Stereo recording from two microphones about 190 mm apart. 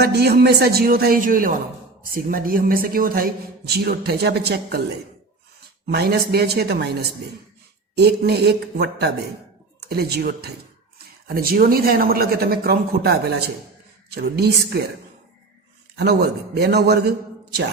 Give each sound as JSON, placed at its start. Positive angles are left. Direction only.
{"t": 0.0, "sound": "speech", "side_deg": -55}
{"t": 5.9, "sound": "speech", "side_deg": -55}
{"t": 7.9, "sound": "speech", "side_deg": -60}
{"t": 16.0, "sound": "a man's voice", "side_deg": -60}